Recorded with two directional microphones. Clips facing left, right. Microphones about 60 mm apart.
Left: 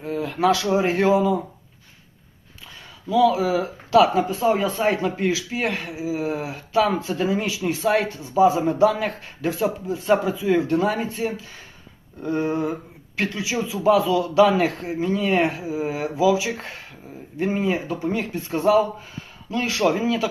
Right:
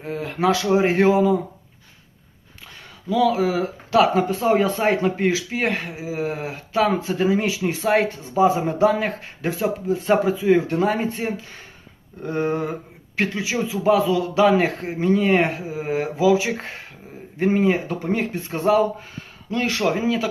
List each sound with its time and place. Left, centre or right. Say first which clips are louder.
0.0 s speech: left 1 dB; right
3.3 s speech: right 1 dB; right
19.8 s speech: left 2 dB; right